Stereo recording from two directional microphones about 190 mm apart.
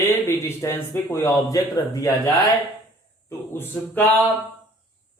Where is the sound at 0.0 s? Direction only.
10° left (ahead or behind).